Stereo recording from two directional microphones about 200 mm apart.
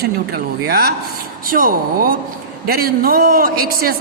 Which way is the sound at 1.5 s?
45° right (ahead or behind).